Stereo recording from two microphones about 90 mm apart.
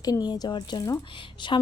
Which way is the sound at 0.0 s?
45° left (ahead or behind).